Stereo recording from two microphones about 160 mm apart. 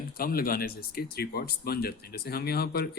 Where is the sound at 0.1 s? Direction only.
65° left (ahead or behind).